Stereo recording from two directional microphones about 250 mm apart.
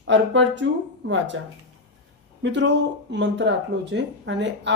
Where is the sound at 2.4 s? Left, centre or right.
Right.